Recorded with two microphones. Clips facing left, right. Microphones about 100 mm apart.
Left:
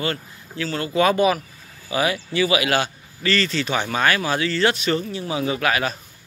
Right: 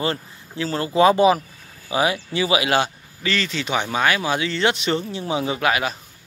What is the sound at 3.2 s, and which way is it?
Speech, 15° right (ahead or behind).